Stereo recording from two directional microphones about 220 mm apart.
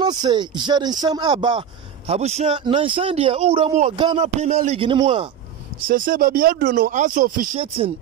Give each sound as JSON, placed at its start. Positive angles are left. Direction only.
{"t": 0.0, "sound": "a man's voice", "side_deg": -20}
{"t": 5.9, "sound": "speech", "side_deg": -40}